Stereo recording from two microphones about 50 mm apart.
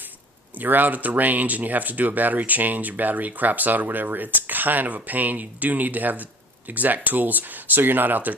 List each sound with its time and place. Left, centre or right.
0.5 s speech: right